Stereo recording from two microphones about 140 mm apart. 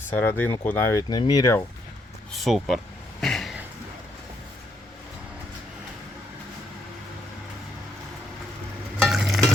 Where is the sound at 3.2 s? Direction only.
Centre (ahead or behind).